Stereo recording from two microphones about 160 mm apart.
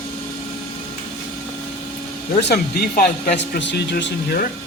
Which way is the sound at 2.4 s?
75° left (ahead or behind).